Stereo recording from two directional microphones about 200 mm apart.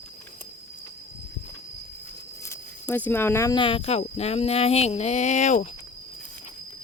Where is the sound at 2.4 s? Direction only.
10° left (ahead or behind); by 5.6 s 35° left (ahead or behind).